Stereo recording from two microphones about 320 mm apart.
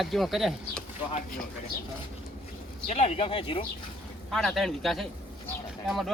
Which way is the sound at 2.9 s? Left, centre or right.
Centre.